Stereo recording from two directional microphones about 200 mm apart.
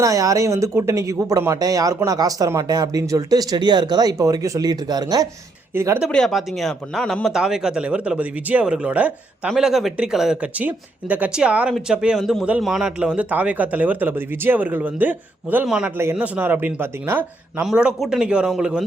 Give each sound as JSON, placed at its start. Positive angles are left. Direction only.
{"t": 0.0, "sound": "speech", "side_deg": -15}
{"t": 6.1, "sound": "speech", "side_deg": 0}